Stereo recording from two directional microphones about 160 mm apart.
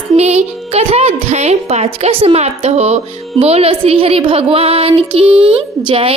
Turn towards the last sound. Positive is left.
turn(degrees=-35)  # may be behind; listen again after turning